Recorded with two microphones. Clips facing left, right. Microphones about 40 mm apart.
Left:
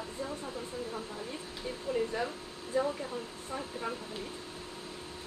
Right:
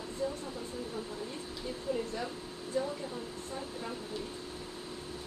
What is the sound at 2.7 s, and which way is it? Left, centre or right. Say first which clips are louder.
Speech: left 3 dB; centre.